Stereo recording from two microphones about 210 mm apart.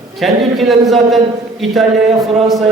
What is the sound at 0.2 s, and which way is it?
A man's voice, centre (ahead or behind).